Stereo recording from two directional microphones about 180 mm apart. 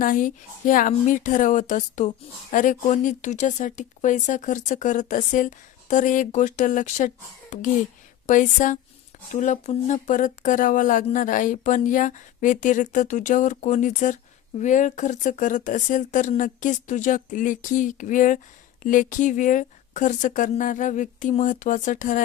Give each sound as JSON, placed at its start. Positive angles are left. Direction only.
{"t": 0.0, "sound": "a woman's voice", "side_deg": 45}